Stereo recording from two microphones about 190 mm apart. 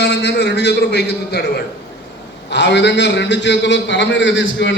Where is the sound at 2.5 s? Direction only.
65° left (ahead or behind).